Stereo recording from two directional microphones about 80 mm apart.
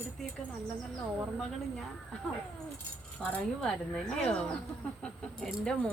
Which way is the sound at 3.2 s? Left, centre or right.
Centre.